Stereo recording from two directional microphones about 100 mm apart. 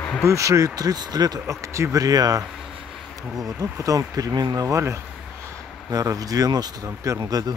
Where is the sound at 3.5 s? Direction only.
35° right (ahead or behind).